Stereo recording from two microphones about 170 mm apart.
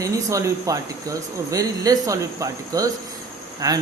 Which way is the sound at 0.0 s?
20° right (ahead or behind).